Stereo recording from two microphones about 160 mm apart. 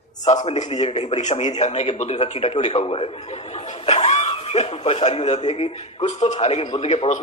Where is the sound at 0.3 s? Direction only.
45° left (ahead or behind).